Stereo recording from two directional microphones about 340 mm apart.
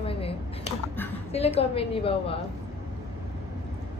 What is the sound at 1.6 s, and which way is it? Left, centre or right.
Speech, centre.